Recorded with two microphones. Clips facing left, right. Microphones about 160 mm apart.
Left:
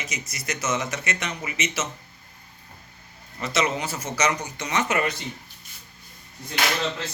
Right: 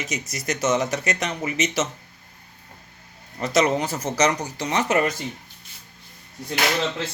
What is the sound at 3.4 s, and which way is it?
Speech, 40° right (ahead or behind).